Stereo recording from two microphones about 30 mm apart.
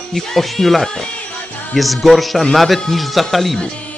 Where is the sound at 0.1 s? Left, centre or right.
Centre.